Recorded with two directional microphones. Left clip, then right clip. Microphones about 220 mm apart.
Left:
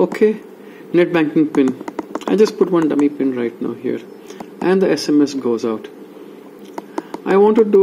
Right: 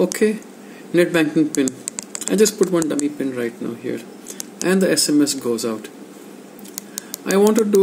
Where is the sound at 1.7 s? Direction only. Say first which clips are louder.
Left 7 dB; 15° right (ahead or behind).